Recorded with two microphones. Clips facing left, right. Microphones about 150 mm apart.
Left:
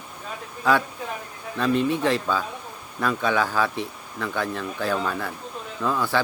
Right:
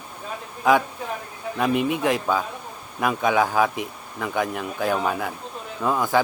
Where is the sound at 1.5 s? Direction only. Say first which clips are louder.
Even; 15° right (ahead or behind).